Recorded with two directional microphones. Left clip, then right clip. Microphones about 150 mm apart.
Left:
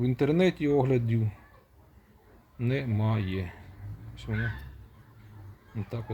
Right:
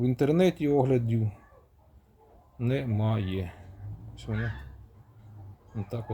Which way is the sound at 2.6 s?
15° right (ahead or behind).